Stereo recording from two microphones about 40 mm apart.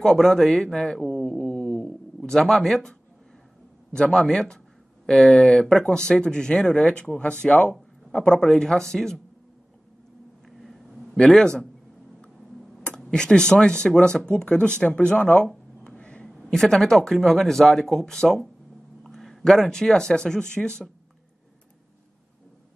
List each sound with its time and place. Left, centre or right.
0.0 s speech: centre
0.9 s a sound: centre
2.2 s a man's voice: centre; by 8.4 s left
8.4 s speech: centre
10.6 s a sound: centre
11.2 s speech: centre
13.1 s speech: centre
15.9 s a sound: left
16.5 s speech: centre